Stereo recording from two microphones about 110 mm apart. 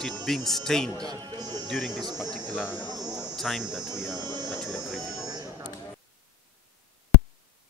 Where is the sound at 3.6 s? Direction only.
10° right (ahead or behind).